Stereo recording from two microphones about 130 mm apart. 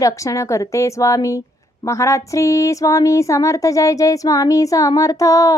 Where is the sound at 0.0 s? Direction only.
25° left (ahead or behind).